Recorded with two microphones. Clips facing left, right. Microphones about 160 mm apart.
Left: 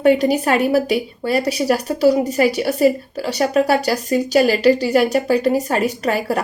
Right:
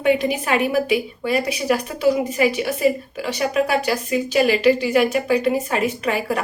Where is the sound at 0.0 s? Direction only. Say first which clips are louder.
Left 5 dB; 40° left (ahead or behind).